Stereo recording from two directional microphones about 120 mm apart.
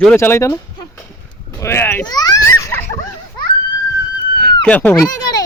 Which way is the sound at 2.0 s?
35° left (ahead or behind).